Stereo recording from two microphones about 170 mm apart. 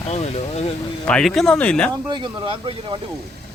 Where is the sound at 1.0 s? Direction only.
5° left (ahead or behind).